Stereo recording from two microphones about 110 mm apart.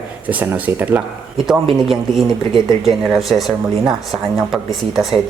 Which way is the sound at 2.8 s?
Centre (ahead or behind).